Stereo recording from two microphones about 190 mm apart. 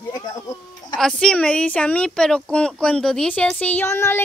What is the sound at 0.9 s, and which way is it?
A woman's voice, 5° left (ahead or behind).